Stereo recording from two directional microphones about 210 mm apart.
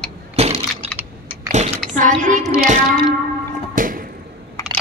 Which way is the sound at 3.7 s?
40° right (ahead or behind).